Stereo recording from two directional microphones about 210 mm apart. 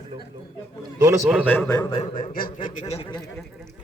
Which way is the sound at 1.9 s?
25° left (ahead or behind).